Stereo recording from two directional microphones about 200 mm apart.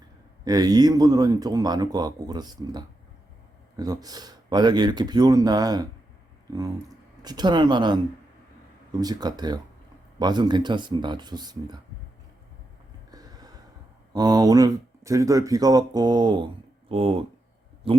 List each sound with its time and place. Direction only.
0.4 s speech: 20° right (ahead or behind)
7.2 s speech: 20° right (ahead or behind)
9.0 s speech: 20° right (ahead or behind)
13.1 s a sound: 20° right (ahead or behind)
14.1 s speech: 20° right (ahead or behind)